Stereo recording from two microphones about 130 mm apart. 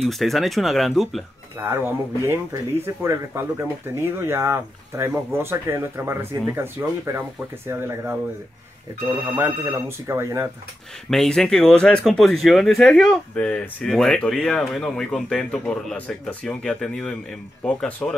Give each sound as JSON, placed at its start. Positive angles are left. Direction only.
{"t": 0.0, "sound": "speech", "side_deg": 0}
{"t": 1.6, "sound": "speech", "side_deg": -20}
{"t": 9.4, "sound": "speech", "side_deg": -20}
{"t": 11.1, "sound": "speech", "side_deg": 5}